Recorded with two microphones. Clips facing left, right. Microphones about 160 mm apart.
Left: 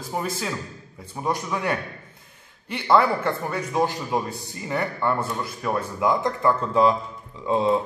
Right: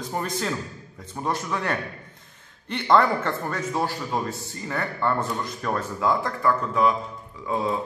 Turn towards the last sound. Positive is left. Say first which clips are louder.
# left 4 dB
turn(degrees=25)  # may be behind; listen again after turning